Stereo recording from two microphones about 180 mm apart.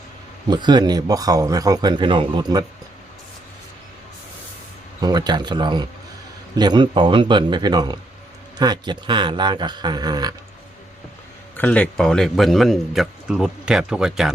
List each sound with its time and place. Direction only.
0.5 s a man's voice: 25° right (ahead or behind)
4.9 s a man's voice: 20° right (ahead or behind)
11.5 s a man's voice: 10° left (ahead or behind)